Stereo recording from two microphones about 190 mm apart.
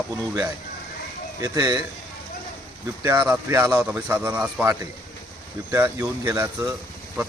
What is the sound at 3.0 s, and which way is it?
Speech, 10° right (ahead or behind).